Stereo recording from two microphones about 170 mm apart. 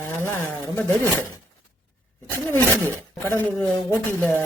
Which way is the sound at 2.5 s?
10° left (ahead or behind).